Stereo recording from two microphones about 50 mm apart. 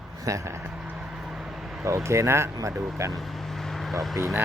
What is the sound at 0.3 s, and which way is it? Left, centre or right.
Speech, right.